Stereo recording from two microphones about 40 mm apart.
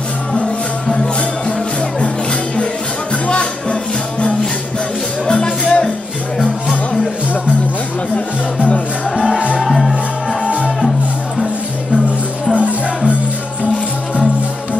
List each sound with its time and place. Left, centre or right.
0.3 s music: centre
5.3 s music: centre
6.4 s music: centre
8.5 s music: left
9.6 s music: centre
12.5 s music: right